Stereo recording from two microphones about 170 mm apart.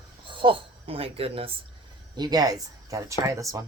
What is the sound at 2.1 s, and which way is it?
Cutlery, 25° right (ahead or behind).